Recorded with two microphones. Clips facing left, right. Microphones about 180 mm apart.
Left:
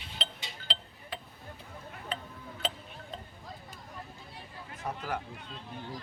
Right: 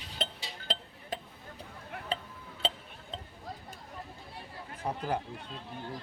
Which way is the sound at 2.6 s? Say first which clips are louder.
Right 2 dB; 30° right (ahead or behind).